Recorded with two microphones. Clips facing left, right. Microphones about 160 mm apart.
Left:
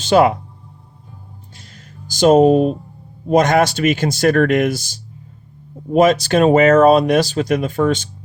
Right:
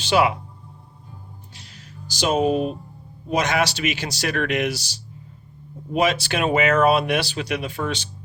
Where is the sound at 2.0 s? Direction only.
45° left (ahead or behind).